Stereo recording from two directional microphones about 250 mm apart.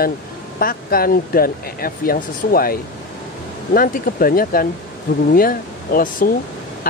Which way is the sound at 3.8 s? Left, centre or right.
Left.